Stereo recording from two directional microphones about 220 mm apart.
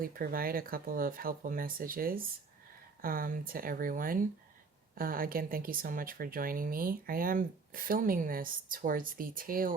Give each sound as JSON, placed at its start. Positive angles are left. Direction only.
{"t": 0.0, "sound": "speech", "side_deg": -40}